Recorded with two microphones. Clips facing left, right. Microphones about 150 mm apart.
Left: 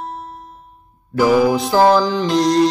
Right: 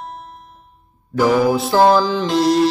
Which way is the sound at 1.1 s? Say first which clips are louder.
Left 1 dB; 10° left (ahead or behind).